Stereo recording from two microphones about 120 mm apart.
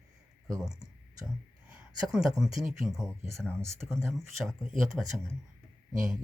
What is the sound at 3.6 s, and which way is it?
Speech, 20° right (ahead or behind).